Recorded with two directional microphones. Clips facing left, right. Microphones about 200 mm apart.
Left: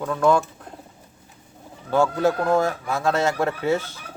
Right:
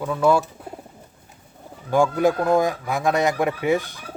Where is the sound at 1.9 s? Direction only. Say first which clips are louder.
Right 1 dB; 15° right (ahead or behind).